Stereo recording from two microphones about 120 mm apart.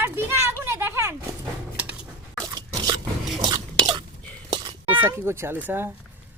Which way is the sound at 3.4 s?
35° right (ahead or behind).